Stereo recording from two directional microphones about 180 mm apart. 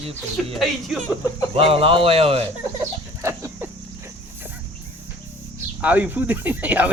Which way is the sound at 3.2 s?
15° right (ahead or behind).